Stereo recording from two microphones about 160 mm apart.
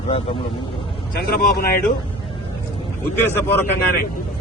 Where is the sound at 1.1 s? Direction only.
70° left (ahead or behind).